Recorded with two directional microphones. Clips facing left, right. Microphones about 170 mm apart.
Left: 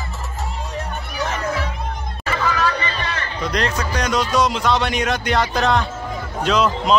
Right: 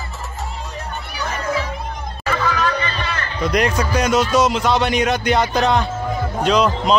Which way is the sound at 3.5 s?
10° right (ahead or behind).